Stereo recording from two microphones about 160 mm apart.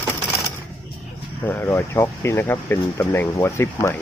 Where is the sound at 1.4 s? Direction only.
15° left (ahead or behind).